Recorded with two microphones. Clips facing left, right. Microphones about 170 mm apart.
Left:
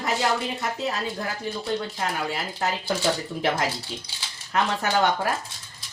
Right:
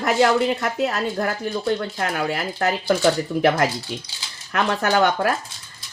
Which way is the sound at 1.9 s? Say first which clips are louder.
Right 4 dB; 65° right (ahead or behind).